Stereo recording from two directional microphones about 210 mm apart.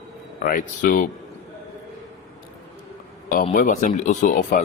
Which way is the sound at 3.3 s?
40° left (ahead or behind).